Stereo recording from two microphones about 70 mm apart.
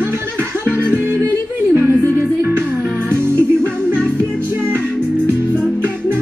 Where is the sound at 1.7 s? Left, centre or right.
Right.